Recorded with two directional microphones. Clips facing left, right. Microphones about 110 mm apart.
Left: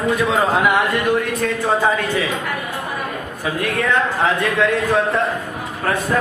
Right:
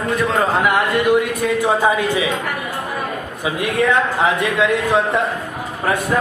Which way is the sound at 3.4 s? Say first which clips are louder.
Right 3 dB; 20° right (ahead or behind).